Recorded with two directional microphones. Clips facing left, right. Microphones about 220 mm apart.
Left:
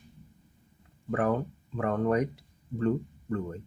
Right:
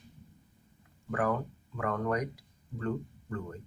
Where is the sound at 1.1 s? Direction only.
25° left (ahead or behind).